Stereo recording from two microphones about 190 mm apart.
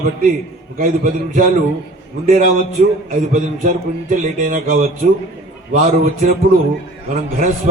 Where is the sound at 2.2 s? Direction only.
45° right (ahead or behind).